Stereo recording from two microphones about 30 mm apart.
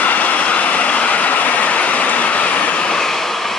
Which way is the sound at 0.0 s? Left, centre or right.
Left.